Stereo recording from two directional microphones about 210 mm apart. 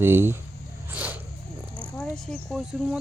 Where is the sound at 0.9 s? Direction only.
10° right (ahead or behind).